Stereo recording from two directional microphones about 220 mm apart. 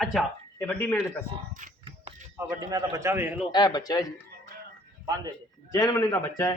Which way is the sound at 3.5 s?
20° left (ahead or behind).